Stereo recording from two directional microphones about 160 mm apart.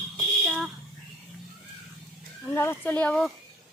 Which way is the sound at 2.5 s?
15° left (ahead or behind).